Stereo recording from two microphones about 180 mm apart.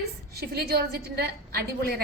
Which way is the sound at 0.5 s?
60° right (ahead or behind).